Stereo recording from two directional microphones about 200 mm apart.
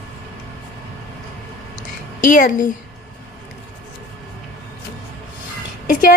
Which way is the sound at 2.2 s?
40° left (ahead or behind).